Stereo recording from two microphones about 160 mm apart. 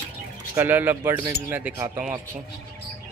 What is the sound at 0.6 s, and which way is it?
Speech, 10° right (ahead or behind).